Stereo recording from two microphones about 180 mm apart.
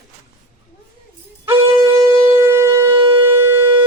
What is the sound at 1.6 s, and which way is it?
Shofar, 25° right (ahead or behind).